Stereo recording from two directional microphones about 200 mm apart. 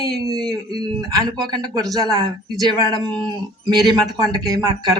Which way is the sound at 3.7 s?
20° right (ahead or behind).